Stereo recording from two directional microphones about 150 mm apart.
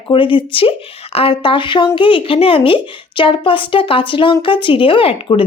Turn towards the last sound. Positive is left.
turn(degrees=35)  # may be behind; listen again after turning